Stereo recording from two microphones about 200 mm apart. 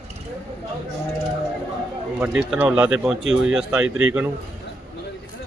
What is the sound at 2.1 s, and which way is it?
A man's voice, 10° right (ahead or behind).